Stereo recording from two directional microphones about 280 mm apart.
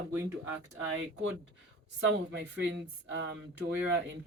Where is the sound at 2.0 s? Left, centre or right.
Right.